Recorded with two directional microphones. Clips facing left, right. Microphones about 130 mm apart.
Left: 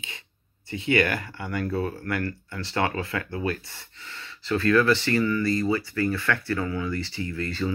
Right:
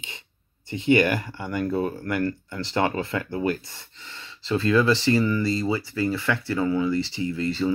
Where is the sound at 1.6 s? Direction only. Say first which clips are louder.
Right 3 dB; 15° right (ahead or behind).